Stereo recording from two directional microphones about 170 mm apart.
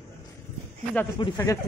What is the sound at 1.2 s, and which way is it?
Speech, 20° left (ahead or behind).